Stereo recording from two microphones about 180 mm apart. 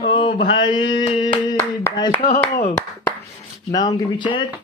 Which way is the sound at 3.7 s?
20° left (ahead or behind).